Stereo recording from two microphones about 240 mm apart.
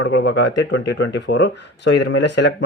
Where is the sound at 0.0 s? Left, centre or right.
Left.